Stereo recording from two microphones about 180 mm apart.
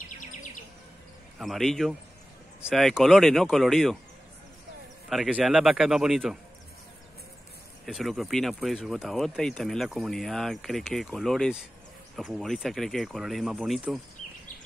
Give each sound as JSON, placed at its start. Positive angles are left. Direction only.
{"t": 0.2, "sound": "bird vocalization", "side_deg": 45}
{"t": 1.4, "sound": "speech", "side_deg": 0}
{"t": 5.1, "sound": "speech", "side_deg": 0}
{"t": 7.8, "sound": "speech", "side_deg": 0}